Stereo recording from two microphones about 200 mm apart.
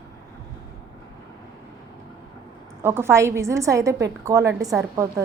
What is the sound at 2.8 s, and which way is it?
A woman's voice, 10° right (ahead or behind).